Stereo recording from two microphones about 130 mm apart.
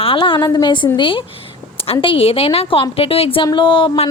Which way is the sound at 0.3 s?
30° left (ahead or behind).